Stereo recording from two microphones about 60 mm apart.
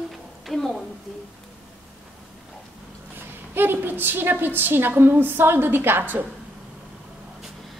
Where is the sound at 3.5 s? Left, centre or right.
Right.